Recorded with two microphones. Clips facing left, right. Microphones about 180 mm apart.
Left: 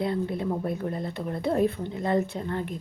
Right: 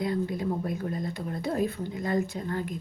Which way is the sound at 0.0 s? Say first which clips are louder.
Left 1 dB; 30° left (ahead or behind).